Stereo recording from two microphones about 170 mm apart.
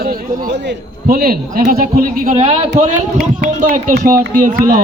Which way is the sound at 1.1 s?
60° right (ahead or behind).